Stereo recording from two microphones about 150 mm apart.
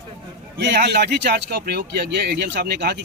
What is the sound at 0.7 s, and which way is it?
Speech, 90° right.